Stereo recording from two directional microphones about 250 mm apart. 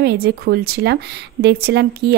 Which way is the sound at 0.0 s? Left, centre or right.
Right.